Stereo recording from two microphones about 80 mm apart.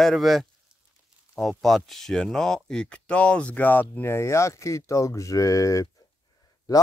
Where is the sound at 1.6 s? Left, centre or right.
Centre.